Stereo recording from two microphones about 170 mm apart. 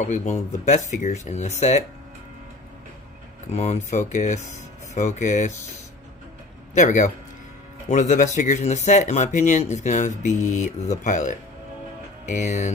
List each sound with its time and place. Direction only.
0.0 s speech: 45° left (ahead or behind)
3.5 s speech: 40° left (ahead or behind)
6.7 s a man's voice: 45° left (ahead or behind)